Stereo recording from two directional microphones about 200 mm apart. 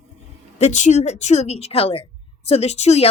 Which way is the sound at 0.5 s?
35° left (ahead or behind).